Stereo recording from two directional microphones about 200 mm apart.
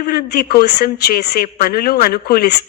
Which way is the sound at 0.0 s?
50° left (ahead or behind).